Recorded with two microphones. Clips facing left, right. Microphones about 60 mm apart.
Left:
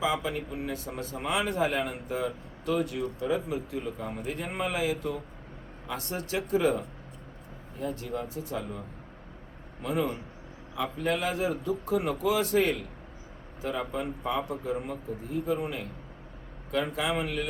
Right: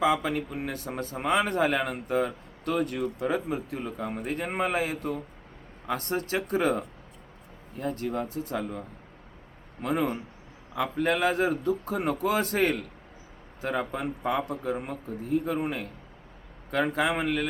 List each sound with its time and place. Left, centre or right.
0.0 s a man's voice: right
9.8 s a man's voice: right